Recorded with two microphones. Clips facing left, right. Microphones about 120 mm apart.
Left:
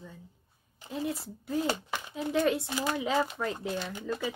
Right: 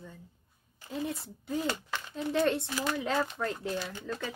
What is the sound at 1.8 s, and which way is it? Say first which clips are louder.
Speech: left 1 dB; 15° left (ahead or behind).